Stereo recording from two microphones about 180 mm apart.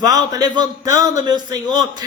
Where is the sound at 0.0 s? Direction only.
20° right (ahead or behind).